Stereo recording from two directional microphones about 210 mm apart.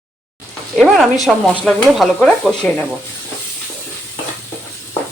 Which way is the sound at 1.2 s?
5° left (ahead or behind).